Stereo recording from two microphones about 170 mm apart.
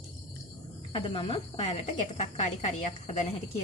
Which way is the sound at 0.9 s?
30° left (ahead or behind).